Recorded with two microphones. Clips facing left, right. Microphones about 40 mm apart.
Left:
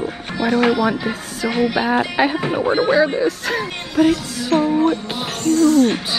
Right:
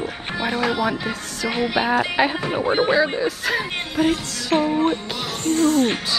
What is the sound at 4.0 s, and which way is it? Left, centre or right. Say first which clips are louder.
Music: left 5 dB; right.